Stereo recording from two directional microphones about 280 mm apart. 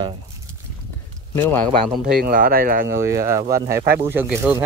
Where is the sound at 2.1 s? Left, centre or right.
Right.